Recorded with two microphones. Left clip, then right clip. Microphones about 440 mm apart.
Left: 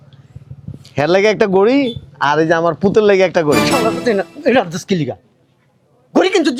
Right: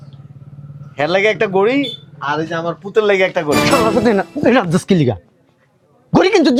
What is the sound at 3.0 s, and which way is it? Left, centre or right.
Speech, left.